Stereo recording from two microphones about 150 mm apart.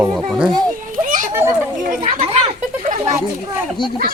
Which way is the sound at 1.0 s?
60° right (ahead or behind).